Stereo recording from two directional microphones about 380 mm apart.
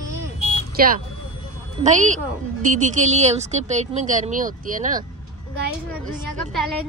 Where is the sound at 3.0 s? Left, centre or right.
Centre.